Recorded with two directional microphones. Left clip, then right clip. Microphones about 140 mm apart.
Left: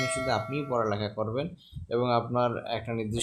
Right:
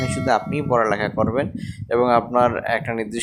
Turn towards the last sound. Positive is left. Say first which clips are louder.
# right 10 dB
turn(degrees=-40)  # may be behind; listen again after turning